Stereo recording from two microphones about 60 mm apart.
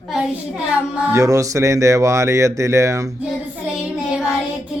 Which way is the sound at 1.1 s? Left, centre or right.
Right.